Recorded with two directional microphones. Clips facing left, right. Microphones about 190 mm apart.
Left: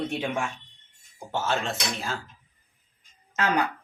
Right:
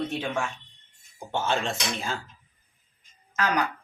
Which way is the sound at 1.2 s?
5° left (ahead or behind).